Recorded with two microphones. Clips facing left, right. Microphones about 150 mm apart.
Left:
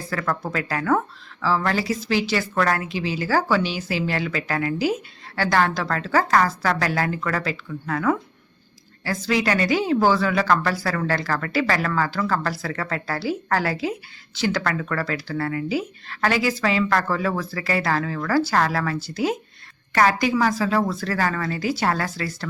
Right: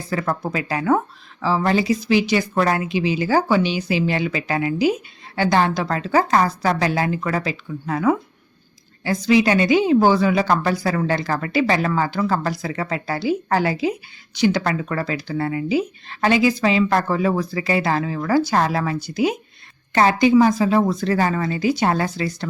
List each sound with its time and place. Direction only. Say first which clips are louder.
0.1 s speech: right 3 dB; 20° right (ahead or behind)